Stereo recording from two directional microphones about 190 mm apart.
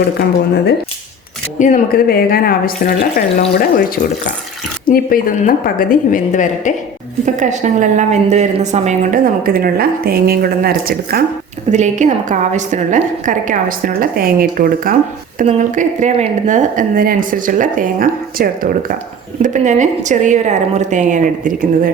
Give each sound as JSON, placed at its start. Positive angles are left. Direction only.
{"t": 1.5, "sound": "a woman's voice", "side_deg": 40}
{"t": 7.3, "sound": "a woman's voice", "side_deg": -40}
{"t": 11.7, "sound": "a woman's voice", "side_deg": -40}